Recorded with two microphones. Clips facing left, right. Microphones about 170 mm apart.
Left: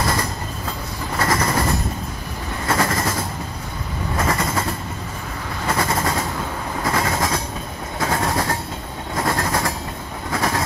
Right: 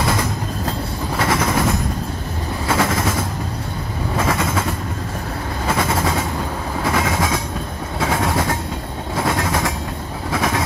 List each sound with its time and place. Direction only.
1.1 s train: 5° right (ahead or behind)
4.2 s train: 5° right (ahead or behind)
6.8 s train: 5° right (ahead or behind)